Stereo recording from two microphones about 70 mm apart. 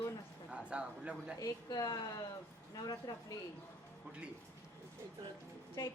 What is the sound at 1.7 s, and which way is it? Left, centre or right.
Speech, left.